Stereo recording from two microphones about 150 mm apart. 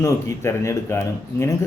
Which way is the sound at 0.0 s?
20° left (ahead or behind).